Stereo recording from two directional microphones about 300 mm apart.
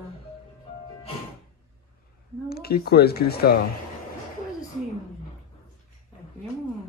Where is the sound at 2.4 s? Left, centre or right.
Left.